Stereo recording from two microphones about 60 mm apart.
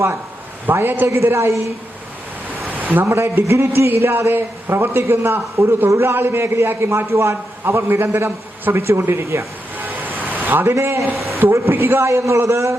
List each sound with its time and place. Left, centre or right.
0.7 s a man's voice: right
1.1 s a man's voice: right
2.6 s a man's voice: right
9.7 s a sound: right
11.2 s a woman's voice: right